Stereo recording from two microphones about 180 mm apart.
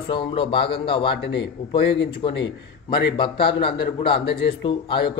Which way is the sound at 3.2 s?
25° left (ahead or behind).